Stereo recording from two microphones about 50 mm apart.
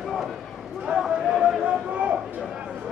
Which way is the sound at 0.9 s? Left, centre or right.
Centre.